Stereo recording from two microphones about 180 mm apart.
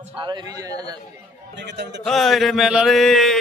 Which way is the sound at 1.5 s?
75° right (ahead or behind).